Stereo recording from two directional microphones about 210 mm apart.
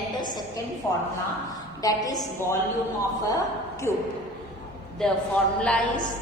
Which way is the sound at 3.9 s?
10° left (ahead or behind).